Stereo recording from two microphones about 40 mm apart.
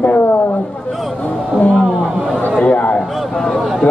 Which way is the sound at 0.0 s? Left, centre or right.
Left.